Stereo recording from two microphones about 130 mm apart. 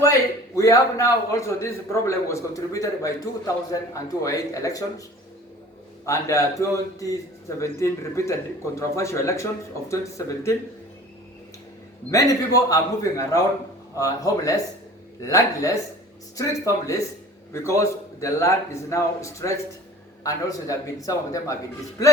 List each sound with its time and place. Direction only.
0.0 s a man's voice: 25° left (ahead or behind)
6.1 s a man's voice: 25° left (ahead or behind)
12.1 s a man's voice: 25° left (ahead or behind)